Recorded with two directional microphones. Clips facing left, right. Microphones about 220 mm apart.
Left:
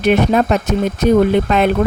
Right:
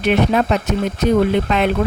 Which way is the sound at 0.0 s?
45° left (ahead or behind).